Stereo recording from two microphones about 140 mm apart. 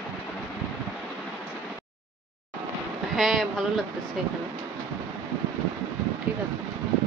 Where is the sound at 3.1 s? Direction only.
Centre (ahead or behind).